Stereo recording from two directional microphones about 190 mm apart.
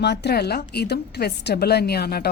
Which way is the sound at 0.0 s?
60° left (ahead or behind).